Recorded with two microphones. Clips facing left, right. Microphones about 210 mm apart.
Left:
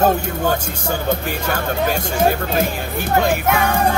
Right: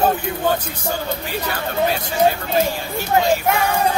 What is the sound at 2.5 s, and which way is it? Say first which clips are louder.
Speech: even; 55° left (ahead or behind).